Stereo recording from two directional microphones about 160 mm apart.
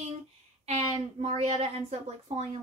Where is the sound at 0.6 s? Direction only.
40° right (ahead or behind).